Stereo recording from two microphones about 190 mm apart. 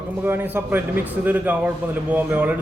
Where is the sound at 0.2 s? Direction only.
10° right (ahead or behind).